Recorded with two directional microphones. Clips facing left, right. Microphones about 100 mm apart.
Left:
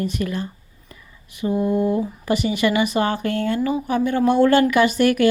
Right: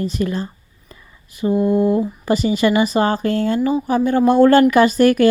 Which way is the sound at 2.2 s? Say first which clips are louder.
Right 3 dB; 35° right (ahead or behind).